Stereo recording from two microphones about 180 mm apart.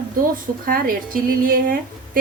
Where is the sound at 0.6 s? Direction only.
55° right (ahead or behind).